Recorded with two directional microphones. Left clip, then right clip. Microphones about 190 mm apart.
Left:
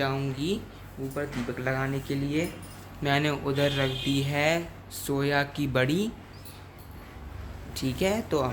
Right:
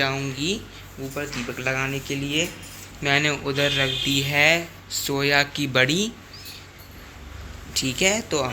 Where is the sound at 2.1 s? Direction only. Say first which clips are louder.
Right 5 dB; 10° right (ahead or behind).